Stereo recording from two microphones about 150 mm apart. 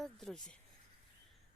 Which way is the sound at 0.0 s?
Centre (ahead or behind).